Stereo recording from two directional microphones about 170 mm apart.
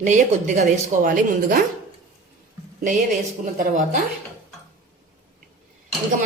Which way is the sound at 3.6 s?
50° right (ahead or behind).